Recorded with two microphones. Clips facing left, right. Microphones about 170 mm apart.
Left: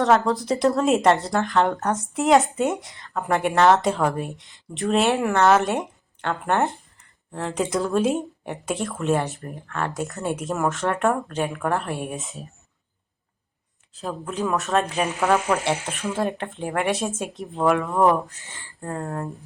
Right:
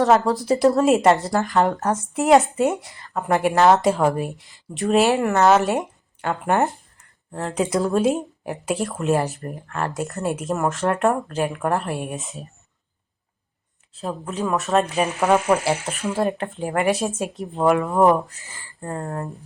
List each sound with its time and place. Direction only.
0.0 s speech: centre (ahead or behind)
13.9 s speech: centre (ahead or behind)
15.2 s speech: 20° right (ahead or behind)
15.6 s speech: centre (ahead or behind)